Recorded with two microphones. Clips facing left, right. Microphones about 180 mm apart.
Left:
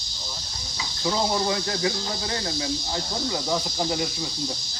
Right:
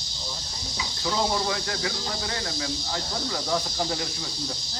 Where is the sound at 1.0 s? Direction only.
20° left (ahead or behind).